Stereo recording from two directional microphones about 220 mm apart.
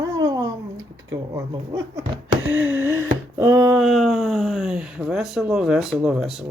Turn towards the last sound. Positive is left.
turn(degrees=0)  # may be behind; listen again after turning